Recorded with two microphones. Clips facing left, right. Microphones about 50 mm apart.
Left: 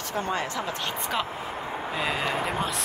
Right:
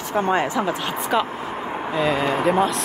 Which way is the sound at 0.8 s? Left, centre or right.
Centre.